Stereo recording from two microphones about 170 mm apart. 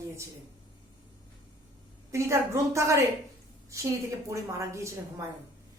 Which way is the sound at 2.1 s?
15° right (ahead or behind).